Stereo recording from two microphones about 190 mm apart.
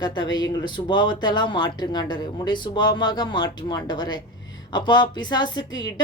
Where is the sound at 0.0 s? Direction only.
20° left (ahead or behind).